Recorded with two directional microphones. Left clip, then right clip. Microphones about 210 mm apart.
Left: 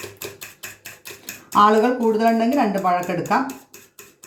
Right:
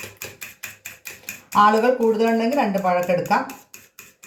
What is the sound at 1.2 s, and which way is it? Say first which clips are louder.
Speech: even; 35° right (ahead or behind).